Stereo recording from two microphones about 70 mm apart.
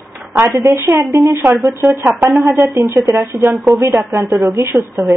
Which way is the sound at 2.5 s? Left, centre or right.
Right.